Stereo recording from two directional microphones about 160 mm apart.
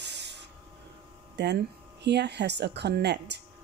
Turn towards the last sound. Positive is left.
turn(degrees=-90)